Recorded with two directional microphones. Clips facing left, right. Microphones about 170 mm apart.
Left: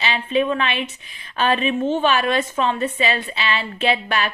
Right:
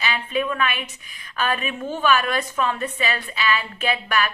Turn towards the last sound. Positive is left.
turn(degrees=25)  # may be behind; listen again after turning